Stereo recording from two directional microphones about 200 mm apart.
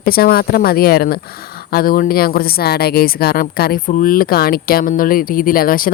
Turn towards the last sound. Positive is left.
turn(degrees=45)  # may be behind; listen again after turning